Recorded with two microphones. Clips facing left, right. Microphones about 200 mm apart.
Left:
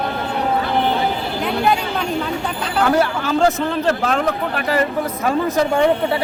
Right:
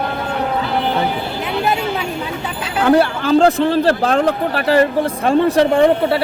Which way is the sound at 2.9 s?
30° right (ahead or behind).